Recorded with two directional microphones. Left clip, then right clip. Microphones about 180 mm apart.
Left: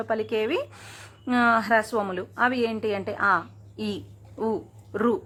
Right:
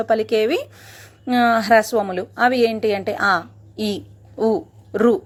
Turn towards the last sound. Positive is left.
turn(degrees=-20)  # may be behind; listen again after turning